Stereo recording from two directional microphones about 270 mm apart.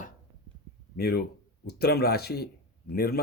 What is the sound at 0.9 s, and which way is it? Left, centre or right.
Speech, left.